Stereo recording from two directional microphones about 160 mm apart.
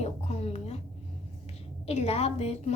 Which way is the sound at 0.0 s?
45° left (ahead or behind).